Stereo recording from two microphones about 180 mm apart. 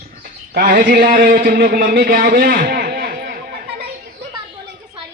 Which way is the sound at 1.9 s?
60° right (ahead or behind).